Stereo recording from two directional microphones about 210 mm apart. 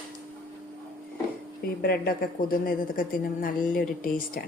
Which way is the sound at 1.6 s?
50° left (ahead or behind).